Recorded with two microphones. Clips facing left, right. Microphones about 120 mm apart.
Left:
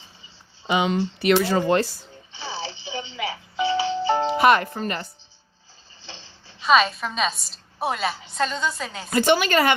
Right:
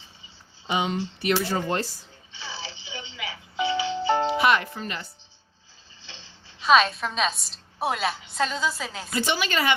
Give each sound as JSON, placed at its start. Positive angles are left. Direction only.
{"t": 0.7, "sound": "speech", "side_deg": 90}
{"t": 2.3, "sound": "music", "side_deg": 35}
{"t": 4.1, "sound": "music", "side_deg": 0}
{"t": 4.4, "sound": "speech", "side_deg": 45}
{"t": 6.0, "sound": "a sound", "side_deg": 35}
{"t": 6.6, "sound": "a woman's voice", "side_deg": 0}
{"t": 9.0, "sound": "speech", "side_deg": 55}